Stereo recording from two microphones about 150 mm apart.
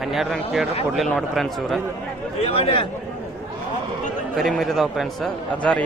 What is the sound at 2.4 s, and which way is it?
Speech, 40° left (ahead or behind).